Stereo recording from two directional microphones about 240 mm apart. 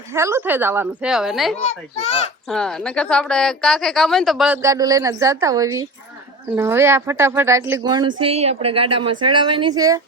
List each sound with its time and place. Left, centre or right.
0.1 s a woman's voice: centre